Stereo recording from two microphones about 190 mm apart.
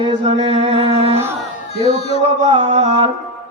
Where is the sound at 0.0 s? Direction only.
25° right (ahead or behind).